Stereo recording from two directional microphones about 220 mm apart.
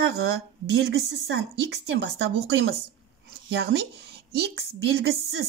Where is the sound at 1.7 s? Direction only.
55° right (ahead or behind).